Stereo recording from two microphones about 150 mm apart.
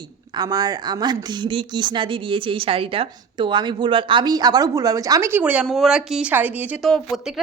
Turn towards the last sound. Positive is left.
turn(degrees=0)  # may be behind; listen again after turning